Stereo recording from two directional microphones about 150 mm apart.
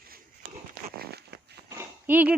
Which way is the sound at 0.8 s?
90° right.